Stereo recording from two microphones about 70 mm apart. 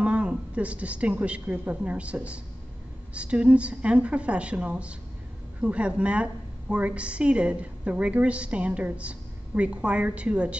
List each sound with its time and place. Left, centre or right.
0.0 s a woman's voice: centre